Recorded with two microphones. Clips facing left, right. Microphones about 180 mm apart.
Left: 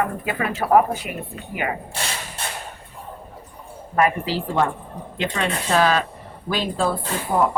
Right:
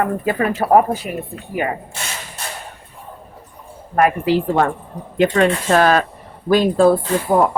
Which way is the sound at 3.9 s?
55° right (ahead or behind).